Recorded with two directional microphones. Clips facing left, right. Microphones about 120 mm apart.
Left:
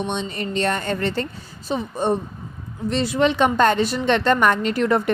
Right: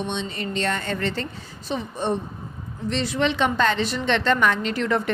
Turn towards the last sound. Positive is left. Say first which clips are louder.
# left 4 dB
turn(degrees=45)  # may be behind; listen again after turning